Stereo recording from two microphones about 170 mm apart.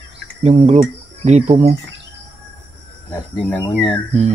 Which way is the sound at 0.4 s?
45° right (ahead or behind).